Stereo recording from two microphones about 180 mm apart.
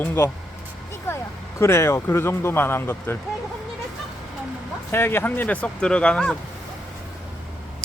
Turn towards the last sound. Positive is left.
turn(degrees=5)  # may be behind; listen again after turning